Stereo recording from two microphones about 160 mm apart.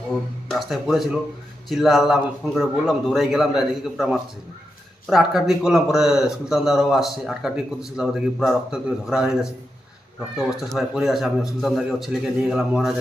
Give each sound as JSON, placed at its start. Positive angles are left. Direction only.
{"t": 0.1, "sound": "a man's voice", "side_deg": 0}